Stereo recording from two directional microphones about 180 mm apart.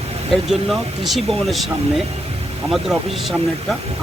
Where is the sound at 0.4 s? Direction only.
Centre (ahead or behind).